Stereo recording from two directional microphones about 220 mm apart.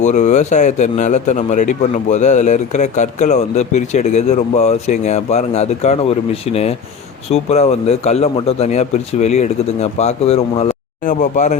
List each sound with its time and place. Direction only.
0.0 s a man's voice: 30° left (ahead or behind)